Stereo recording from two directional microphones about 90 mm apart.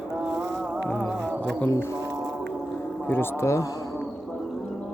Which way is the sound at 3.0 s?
25° left (ahead or behind).